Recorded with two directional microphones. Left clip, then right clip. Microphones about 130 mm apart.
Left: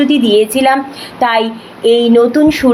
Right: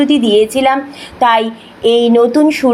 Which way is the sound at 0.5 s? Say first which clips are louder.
Left 1 dB; 20° right (ahead or behind).